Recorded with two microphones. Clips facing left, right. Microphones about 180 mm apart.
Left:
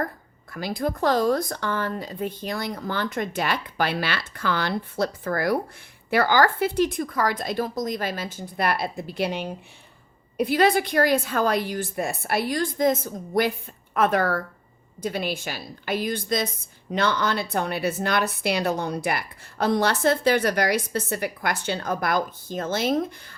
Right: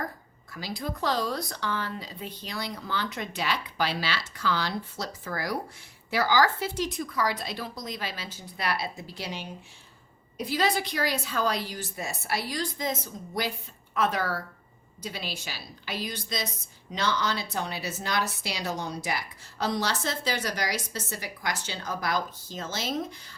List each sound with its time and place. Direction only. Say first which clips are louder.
0.5 s a woman's voice: left 7 dB; 55° left (ahead or behind)